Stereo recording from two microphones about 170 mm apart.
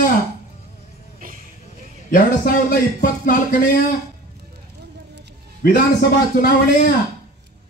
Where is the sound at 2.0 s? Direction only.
55° left (ahead or behind).